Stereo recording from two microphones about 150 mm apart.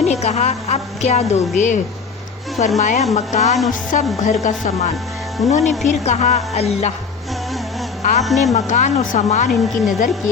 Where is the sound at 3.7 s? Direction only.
55° left (ahead or behind).